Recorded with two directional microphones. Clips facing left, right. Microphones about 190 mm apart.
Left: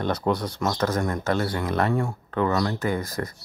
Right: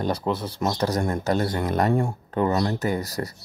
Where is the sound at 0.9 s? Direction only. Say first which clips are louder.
Right 1 dB; 35° right (ahead or behind).